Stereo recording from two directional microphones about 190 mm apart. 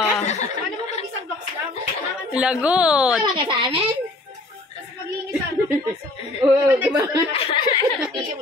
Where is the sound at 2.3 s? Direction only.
5° right (ahead or behind).